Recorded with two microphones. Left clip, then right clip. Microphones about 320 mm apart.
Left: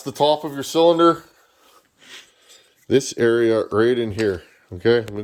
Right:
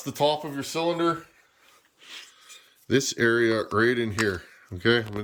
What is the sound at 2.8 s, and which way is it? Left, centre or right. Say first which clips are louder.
Speech: left 5 dB; centre.